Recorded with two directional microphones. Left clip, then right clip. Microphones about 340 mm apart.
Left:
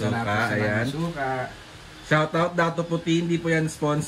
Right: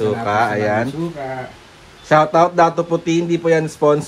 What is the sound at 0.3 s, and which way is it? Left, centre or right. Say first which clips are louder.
Speech: right 8 dB; right.